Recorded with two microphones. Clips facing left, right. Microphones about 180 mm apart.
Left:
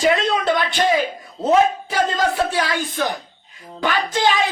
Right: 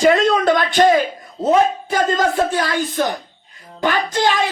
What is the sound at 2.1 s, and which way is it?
A man's voice, 45° right (ahead or behind).